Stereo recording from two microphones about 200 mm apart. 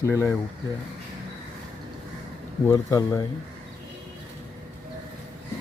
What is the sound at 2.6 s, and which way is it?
Speech, 15° left (ahead or behind).